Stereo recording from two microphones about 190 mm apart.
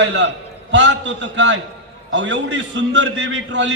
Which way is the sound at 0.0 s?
65° right (ahead or behind).